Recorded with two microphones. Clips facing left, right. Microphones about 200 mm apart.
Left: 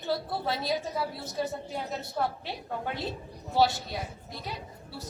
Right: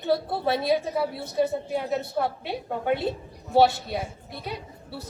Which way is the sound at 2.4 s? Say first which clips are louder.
Right 7 dB; 60° right (ahead or behind).